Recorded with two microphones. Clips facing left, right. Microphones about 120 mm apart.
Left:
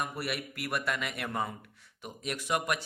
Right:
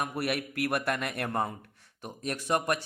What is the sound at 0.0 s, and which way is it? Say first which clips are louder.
A man's voice: right 4 dB; 55° right (ahead or behind).